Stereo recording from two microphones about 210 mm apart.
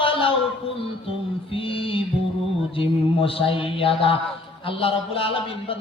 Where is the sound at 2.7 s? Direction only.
25° left (ahead or behind).